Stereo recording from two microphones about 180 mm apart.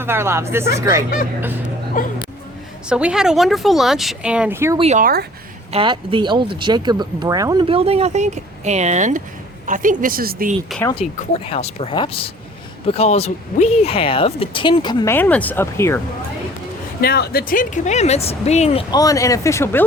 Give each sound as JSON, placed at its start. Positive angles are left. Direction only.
{"t": 0.0, "sound": "speech", "side_deg": -15}
{"t": 2.0, "sound": "speech", "side_deg": 50}
{"t": 2.9, "sound": "speech", "side_deg": -5}
{"t": 4.8, "sound": "speech", "side_deg": -40}
{"t": 10.7, "sound": "speech", "side_deg": 0}
{"t": 11.0, "sound": "speech", "side_deg": 35}
{"t": 15.0, "sound": "speech", "side_deg": 10}
{"t": 17.0, "sound": "speech", "side_deg": 60}
{"t": 18.9, "sound": "speech", "side_deg": 20}